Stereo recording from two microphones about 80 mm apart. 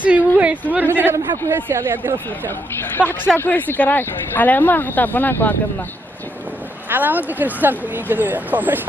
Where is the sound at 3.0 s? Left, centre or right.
Centre.